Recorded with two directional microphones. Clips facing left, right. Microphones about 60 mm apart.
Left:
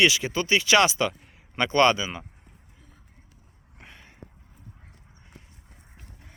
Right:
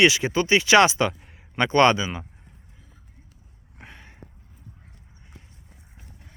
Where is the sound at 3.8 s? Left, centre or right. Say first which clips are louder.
Right 3 dB; right.